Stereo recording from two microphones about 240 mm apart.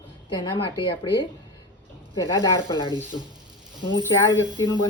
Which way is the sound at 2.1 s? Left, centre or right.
Centre.